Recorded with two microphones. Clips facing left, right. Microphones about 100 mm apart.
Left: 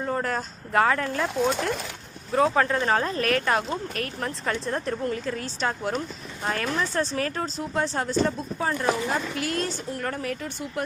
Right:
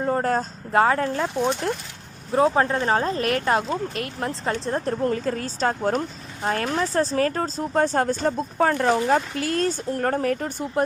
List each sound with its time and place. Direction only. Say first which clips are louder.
0.0 s a sound: right 5 dB; 35° right (ahead or behind)
0.7 s speech: right 3 dB; 30° right (ahead or behind)
2.3 s speech: right 2 dB; 30° right (ahead or behind); by 9.2 s 50° right (ahead or behind)
9.4 s speech: right 4 dB; 30° right (ahead or behind)
9.6 s speech: right 7 dB; 45° right (ahead or behind)